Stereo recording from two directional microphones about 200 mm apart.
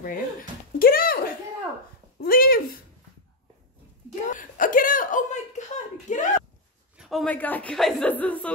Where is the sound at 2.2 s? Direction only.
45° left (ahead or behind).